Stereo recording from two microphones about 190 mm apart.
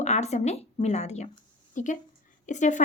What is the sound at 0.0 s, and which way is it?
A woman's voice, 35° left (ahead or behind).